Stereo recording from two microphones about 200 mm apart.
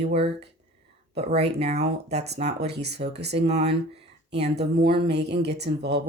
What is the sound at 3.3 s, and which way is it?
Speech, 35° right (ahead or behind).